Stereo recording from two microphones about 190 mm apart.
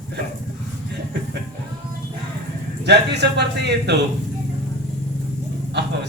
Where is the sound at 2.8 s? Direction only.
60° right (ahead or behind).